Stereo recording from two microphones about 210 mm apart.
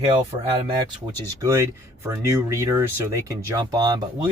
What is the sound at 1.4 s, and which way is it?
A man's voice, 15° right (ahead or behind).